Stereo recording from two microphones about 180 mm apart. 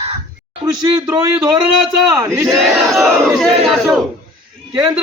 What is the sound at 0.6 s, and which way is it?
Speech, 15° right (ahead or behind).